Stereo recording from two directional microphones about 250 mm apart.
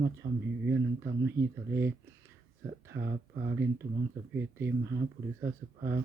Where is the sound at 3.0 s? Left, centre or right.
Right.